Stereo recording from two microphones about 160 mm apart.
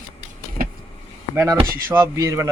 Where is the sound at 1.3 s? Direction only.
20° right (ahead or behind).